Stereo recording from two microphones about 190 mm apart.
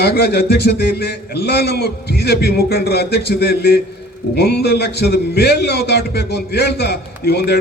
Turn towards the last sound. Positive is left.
turn(degrees=60)  # may be behind; listen again after turning